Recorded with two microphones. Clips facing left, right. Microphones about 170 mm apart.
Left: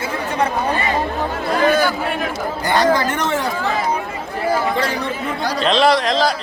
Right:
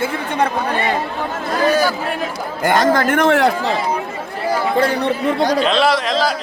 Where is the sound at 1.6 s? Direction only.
40° right (ahead or behind).